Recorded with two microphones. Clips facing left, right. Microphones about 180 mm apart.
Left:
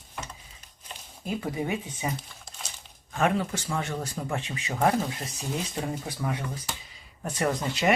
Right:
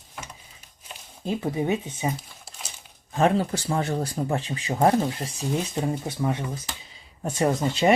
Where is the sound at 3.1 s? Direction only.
35° right (ahead or behind).